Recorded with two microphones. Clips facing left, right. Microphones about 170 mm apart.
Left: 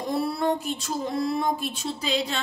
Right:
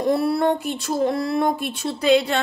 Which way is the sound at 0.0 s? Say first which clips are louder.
Right 6 dB; 65° right (ahead or behind).